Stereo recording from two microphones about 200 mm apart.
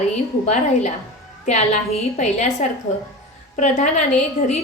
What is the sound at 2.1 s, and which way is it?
A woman's voice, 35° left (ahead or behind).